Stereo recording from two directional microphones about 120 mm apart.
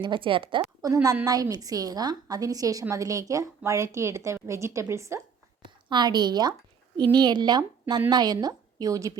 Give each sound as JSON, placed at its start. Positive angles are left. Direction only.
{"t": 0.0, "sound": "a woman's voice", "side_deg": -45}
{"t": 0.8, "sound": "a woman's voice", "side_deg": -30}
{"t": 5.9, "sound": "a woman's voice", "side_deg": -35}